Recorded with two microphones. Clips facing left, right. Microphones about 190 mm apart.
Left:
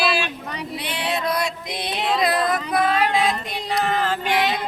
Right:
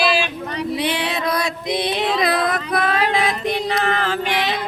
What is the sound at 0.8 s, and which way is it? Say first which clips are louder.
Female singing: even; 90° right.